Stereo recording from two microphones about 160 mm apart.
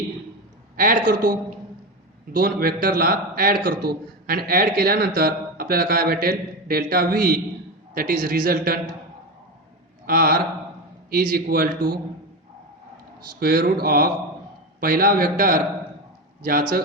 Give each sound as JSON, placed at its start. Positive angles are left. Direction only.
{"t": 0.8, "sound": "a man's voice", "side_deg": -60}
{"t": 10.1, "sound": "a man's voice", "side_deg": -70}
{"t": 13.4, "sound": "a man's voice", "side_deg": -70}